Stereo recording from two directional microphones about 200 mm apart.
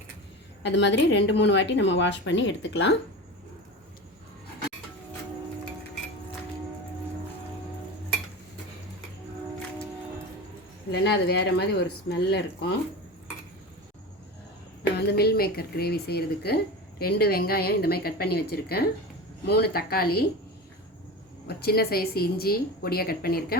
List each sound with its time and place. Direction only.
0.6 s a woman's voice: 60° left (ahead or behind)
10.9 s a woman's voice: 55° left (ahead or behind)
14.9 s a woman's voice: 50° left (ahead or behind)
21.4 s a woman's voice: 50° left (ahead or behind)